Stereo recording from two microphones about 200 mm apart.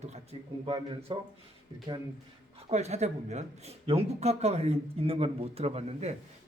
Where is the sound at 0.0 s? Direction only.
30° right (ahead or behind).